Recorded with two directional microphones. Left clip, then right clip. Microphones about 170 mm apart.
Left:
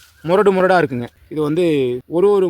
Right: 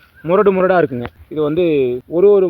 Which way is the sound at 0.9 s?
30° left (ahead or behind).